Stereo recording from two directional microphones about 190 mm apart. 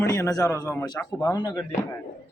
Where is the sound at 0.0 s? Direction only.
15° left (ahead or behind).